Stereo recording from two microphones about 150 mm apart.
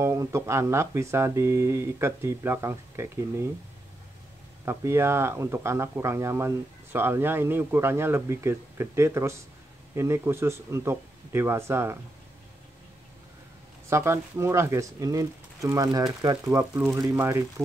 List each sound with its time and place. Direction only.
0.0 s speech: 20° right (ahead or behind)
4.6 s speech: 15° right (ahead or behind)
13.8 s speech: 15° right (ahead or behind)